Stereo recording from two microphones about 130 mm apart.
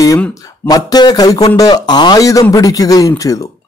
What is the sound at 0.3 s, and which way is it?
Speech, 25° left (ahead or behind).